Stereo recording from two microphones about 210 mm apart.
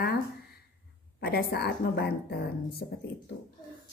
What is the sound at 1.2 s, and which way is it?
A woman's voice, 45° left (ahead or behind).